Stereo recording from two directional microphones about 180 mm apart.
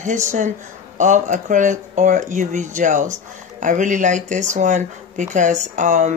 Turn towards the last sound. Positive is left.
turn(degrees=-45)  # may be behind; listen again after turning